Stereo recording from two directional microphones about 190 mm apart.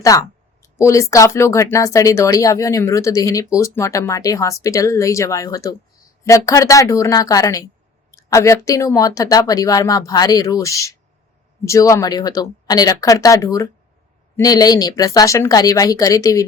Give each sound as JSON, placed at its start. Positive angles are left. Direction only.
{"t": 0.0, "sound": "speech", "side_deg": 15}